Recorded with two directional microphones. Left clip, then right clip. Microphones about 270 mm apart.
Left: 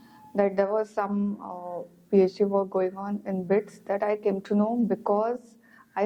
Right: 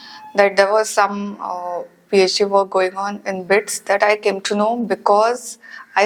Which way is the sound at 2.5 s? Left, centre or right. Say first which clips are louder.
Right 10 dB; right.